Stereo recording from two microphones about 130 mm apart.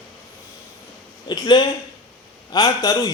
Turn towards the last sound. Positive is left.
turn(degrees=30)  # may be behind; listen again after turning